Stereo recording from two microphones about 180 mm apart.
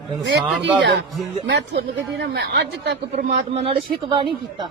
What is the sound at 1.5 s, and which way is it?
Speech, 70° right (ahead or behind).